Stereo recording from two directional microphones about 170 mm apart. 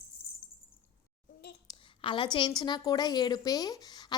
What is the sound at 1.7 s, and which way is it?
A woman's voice, 30° left (ahead or behind).